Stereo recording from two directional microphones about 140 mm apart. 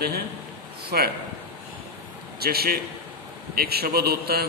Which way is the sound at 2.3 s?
90° right.